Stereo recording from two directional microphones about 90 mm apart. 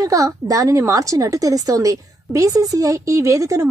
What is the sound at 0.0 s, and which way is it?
A woman's voice, 40° right (ahead or behind).